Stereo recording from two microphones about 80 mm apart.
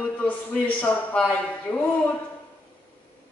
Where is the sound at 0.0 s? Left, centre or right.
Centre.